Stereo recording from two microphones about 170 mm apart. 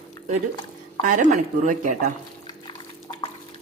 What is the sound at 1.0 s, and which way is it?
Speech, 50° right (ahead or behind).